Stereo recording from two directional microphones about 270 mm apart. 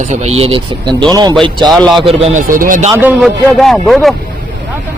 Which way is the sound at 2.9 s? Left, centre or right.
Centre.